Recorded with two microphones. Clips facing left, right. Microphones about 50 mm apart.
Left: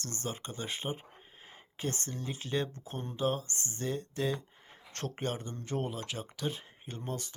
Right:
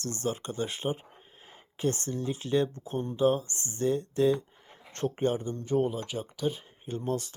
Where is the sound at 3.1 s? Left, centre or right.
Right.